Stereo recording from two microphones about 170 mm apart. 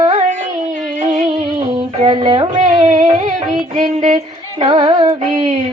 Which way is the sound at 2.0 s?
30° right (ahead or behind).